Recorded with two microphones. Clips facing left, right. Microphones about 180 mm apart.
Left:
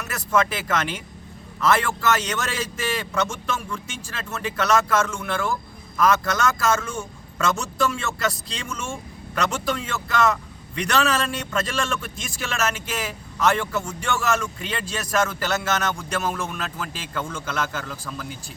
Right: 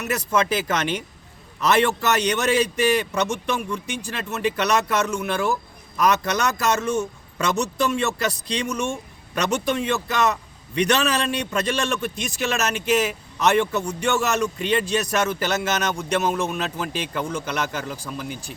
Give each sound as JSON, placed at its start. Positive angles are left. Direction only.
{"t": 0.0, "sound": "speech", "side_deg": -20}